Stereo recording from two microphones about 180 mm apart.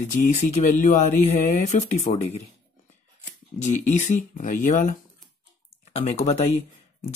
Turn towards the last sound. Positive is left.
turn(degrees=35)  # may be behind; listen again after turning